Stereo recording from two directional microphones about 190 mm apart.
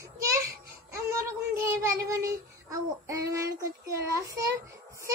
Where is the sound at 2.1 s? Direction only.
15° right (ahead or behind).